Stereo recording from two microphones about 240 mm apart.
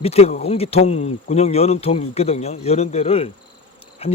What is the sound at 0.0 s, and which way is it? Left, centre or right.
Speech, left.